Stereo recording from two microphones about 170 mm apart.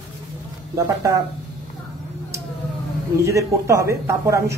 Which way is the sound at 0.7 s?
20° right (ahead or behind).